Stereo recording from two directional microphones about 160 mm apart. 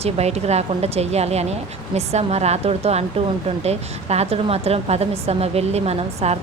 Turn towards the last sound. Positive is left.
turn(degrees=-40)  # may be behind; listen again after turning